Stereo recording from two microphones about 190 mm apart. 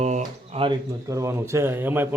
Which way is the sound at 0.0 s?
35° right (ahead or behind).